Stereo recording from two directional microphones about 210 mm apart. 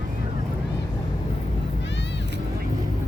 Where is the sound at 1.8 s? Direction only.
55° left (ahead or behind).